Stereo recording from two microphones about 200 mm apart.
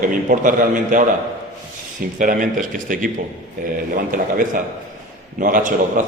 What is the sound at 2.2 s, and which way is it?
A man's voice, 45° right (ahead or behind).